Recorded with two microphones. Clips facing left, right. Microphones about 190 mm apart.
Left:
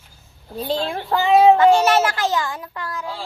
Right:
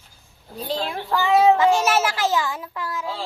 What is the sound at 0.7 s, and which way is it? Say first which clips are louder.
Speech: left 3 dB; 30° left (ahead or behind).